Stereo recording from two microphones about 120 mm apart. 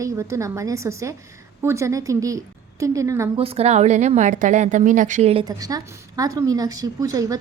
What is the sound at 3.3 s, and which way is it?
A woman's voice, 60° right (ahead or behind).